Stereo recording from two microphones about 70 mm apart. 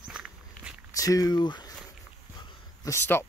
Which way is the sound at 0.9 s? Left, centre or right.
Left.